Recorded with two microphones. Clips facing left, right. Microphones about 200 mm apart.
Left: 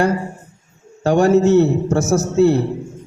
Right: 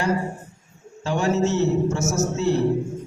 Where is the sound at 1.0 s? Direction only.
55° left (ahead or behind).